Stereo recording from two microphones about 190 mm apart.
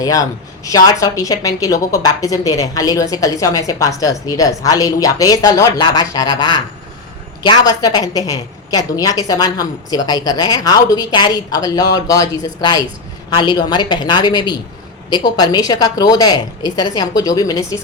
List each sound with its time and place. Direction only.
0.0 s a woman's voice: 20° left (ahead or behind)